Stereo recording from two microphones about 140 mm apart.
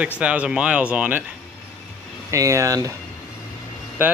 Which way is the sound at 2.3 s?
25° right (ahead or behind).